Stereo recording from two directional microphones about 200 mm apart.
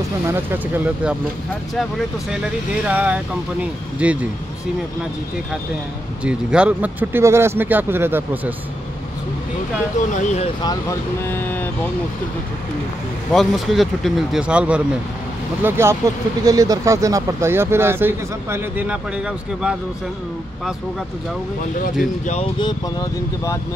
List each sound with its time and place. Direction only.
0.3 s speech: 10° right (ahead or behind)
2.3 s speech: 5° right (ahead or behind)
6.2 s speech: 5° right (ahead or behind)
10.1 s speech: 35° left (ahead or behind)
10.6 s speech: 15° left (ahead or behind)
13.3 s speech: centre (ahead or behind)
22.2 s speech: 30° left (ahead or behind)